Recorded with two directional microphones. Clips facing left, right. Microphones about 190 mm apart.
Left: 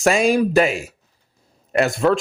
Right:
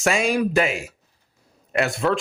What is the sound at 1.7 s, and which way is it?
Speech, 40° left (ahead or behind).